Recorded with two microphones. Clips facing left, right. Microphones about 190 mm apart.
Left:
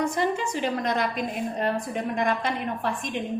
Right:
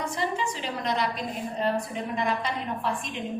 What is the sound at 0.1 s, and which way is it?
A woman's voice, 50° left (ahead or behind).